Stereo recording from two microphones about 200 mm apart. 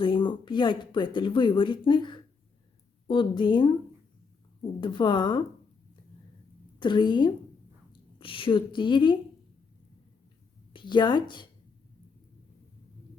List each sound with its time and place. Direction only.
0.0 s speech: 25° left (ahead or behind)
4.8 s speech: 25° left (ahead or behind)
6.7 s speech: 25° left (ahead or behind)
10.7 s speech: 25° left (ahead or behind)